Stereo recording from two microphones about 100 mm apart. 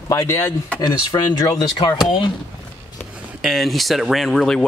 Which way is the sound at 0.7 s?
45° left (ahead or behind).